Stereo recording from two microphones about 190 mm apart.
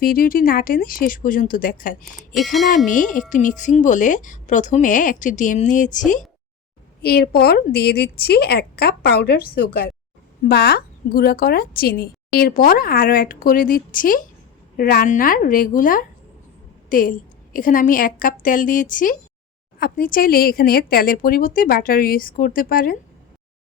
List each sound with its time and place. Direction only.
0.0 s speech: 50° left (ahead or behind)
2.3 s speech: centre (ahead or behind)
2.7 s a woman's voice: 40° left (ahead or behind)
7.0 s a woman's voice: 55° left (ahead or behind)